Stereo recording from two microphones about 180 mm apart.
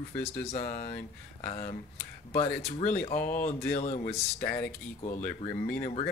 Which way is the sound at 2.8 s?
35° left (ahead or behind).